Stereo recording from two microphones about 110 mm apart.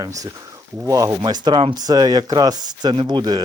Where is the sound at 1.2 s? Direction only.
45° right (ahead or behind).